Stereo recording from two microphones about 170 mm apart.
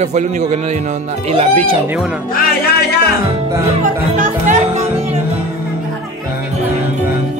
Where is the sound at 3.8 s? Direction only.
50° right (ahead or behind).